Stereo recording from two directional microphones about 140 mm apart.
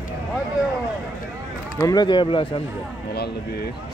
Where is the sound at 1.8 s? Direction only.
25° left (ahead or behind).